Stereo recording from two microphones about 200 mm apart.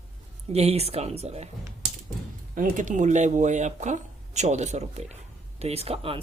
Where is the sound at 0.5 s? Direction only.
30° right (ahead or behind).